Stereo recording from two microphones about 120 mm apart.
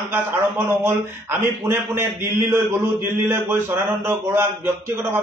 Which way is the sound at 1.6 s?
20° right (ahead or behind).